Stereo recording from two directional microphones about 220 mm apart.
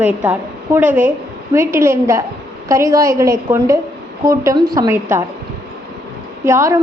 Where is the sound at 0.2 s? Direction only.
10° right (ahead or behind).